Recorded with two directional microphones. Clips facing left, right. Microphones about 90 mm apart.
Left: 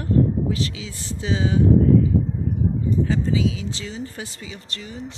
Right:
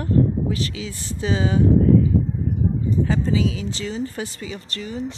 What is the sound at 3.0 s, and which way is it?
Speech, 45° right (ahead or behind).